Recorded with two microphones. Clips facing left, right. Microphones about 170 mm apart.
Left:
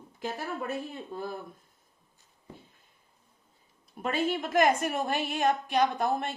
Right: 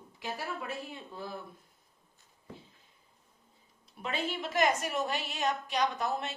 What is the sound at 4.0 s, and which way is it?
A woman's voice, 50° left (ahead or behind).